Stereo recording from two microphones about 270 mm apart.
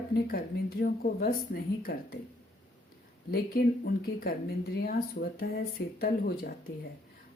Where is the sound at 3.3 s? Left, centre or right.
Left.